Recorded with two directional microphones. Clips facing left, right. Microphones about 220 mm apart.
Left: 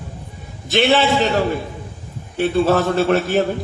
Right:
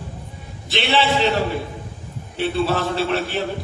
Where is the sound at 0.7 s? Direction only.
45° left (ahead or behind).